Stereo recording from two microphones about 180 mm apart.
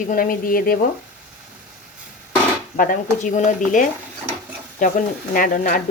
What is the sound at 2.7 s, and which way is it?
Speech, 50° left (ahead or behind).